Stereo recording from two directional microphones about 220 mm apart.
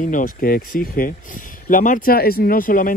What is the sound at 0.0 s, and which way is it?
Speech, 35° left (ahead or behind).